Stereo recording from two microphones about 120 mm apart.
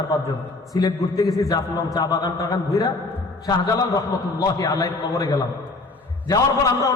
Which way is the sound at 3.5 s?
30° left (ahead or behind).